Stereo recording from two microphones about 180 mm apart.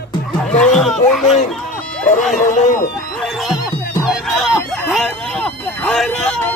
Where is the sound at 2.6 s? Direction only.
45° left (ahead or behind).